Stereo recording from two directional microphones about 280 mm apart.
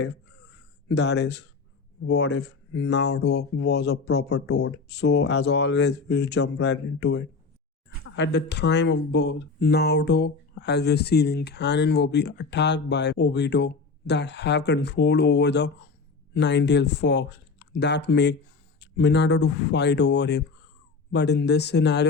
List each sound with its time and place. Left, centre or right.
0.9 s speech: left
4.3 s speech: left
4.5 s speech: left
8.1 s speech: left